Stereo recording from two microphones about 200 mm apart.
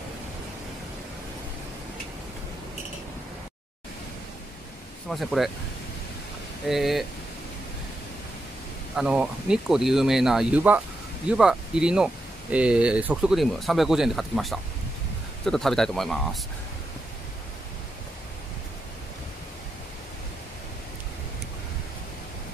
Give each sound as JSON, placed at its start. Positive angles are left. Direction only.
{"t": 5.1, "sound": "speech", "side_deg": 0}
{"t": 6.7, "sound": "speech", "side_deg": 0}
{"t": 8.9, "sound": "speech", "side_deg": -5}